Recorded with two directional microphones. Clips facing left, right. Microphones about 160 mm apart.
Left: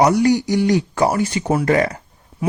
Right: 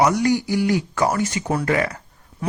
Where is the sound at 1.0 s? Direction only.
15° left (ahead or behind).